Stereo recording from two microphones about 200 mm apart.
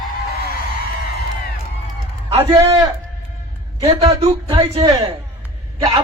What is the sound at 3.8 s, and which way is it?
A woman's voice, 30° right (ahead or behind).